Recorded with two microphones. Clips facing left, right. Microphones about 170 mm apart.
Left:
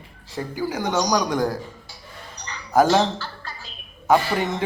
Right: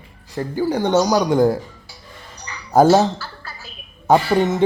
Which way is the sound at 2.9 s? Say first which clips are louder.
Right 5 dB; 10° right (ahead or behind).